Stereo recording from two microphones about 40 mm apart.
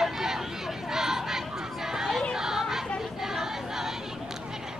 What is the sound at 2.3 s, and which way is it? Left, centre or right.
Chatter, centre.